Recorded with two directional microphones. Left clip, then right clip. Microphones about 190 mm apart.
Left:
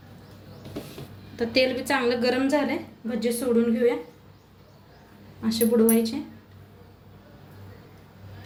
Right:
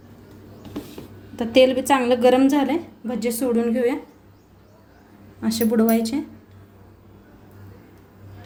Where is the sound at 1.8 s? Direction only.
45° right (ahead or behind); by 3.9 s 65° right (ahead or behind).